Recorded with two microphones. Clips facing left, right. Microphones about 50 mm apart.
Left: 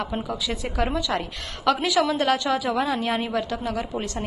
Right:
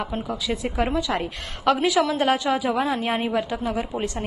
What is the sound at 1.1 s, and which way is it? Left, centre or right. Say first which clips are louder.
Speech: right 1 dB; right.